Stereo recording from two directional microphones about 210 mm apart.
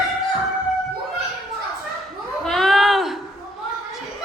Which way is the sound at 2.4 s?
Centre (ahead or behind).